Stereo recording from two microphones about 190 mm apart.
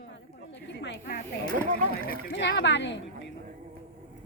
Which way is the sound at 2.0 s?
65° left (ahead or behind).